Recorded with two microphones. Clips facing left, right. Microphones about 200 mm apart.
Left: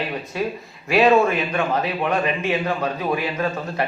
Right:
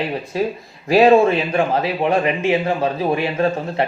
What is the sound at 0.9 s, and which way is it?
Speech, 35° right (ahead or behind).